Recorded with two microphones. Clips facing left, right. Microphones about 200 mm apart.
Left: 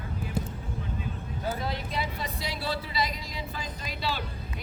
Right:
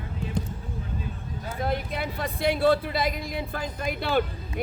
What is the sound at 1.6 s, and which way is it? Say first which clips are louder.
Speech: right 4 dB; 55° right (ahead or behind).